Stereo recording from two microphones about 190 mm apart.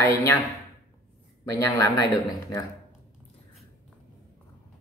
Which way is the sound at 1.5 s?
15° left (ahead or behind).